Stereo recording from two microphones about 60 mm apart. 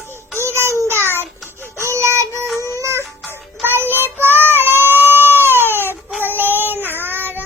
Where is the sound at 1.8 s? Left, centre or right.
Right.